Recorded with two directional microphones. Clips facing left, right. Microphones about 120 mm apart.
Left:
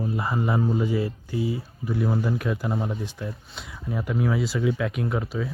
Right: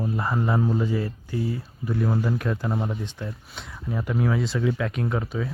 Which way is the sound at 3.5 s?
5° left (ahead or behind).